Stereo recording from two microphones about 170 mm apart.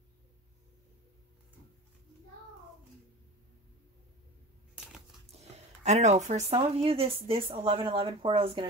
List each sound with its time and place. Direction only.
5.3 s speech: 40° right (ahead or behind)